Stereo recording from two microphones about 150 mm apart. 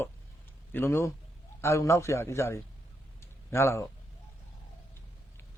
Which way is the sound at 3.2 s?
20° left (ahead or behind).